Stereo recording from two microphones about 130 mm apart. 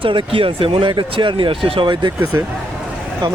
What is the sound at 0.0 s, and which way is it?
Speech, 40° right (ahead or behind).